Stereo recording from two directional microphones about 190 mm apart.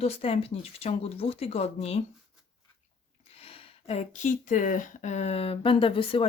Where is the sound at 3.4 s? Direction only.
30° left (ahead or behind).